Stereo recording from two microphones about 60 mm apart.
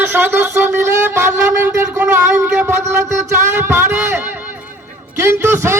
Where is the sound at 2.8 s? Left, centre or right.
Right.